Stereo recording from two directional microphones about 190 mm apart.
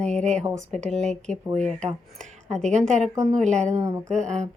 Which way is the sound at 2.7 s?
35° right (ahead or behind).